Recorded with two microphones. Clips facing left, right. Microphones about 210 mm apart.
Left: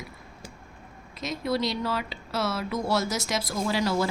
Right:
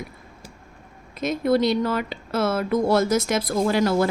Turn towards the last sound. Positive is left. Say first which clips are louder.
# right 6 dB
turn(degrees=-55)  # may be behind; listen again after turning